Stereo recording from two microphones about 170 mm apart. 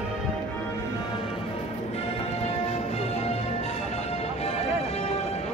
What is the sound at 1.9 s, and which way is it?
Music, 40° left (ahead or behind).